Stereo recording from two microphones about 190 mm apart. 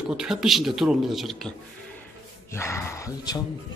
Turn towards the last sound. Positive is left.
turn(degrees=20)  # may be behind; listen again after turning